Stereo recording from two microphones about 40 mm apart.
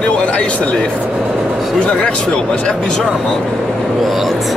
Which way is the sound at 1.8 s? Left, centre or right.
Left.